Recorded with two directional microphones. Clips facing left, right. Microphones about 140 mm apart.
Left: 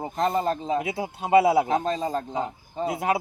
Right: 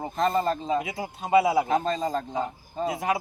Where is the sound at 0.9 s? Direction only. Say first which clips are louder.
Left 3 dB; 25° left (ahead or behind).